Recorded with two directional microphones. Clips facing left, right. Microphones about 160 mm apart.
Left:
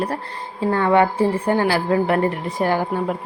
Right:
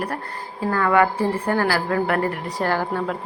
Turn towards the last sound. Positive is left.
turn(degrees=15)  # may be behind; listen again after turning